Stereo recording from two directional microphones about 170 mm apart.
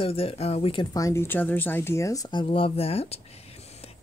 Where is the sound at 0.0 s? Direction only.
35° left (ahead or behind).